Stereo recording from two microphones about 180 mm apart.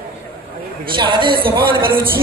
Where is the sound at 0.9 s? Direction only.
25° right (ahead or behind).